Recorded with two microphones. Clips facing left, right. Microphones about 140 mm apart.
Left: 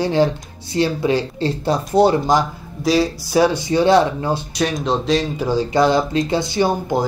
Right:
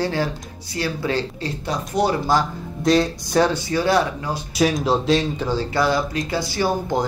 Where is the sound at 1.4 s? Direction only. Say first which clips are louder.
Left 7 dB; 30° left (ahead or behind).